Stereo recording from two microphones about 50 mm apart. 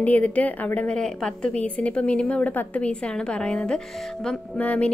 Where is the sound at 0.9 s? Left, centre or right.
Centre.